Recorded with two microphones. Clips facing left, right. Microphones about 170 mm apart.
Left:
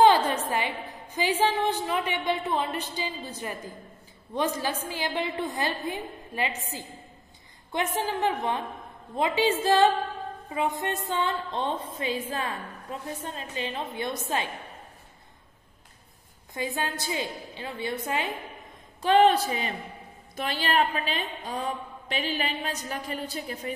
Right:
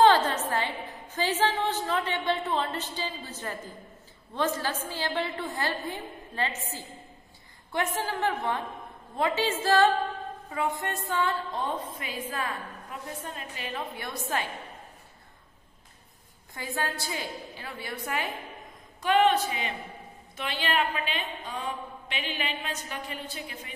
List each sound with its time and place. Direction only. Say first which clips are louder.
0.0 s a sound: left 1 dB; 15° left (ahead or behind)
0.5 s a woman's voice: left 1 dB; 10° left (ahead or behind)
7.7 s a woman's voice: left 2 dB; 15° left (ahead or behind)
16.5 s a woman's voice: left 2 dB; 20° left (ahead or behind); by 23.7 s 40° left (ahead or behind)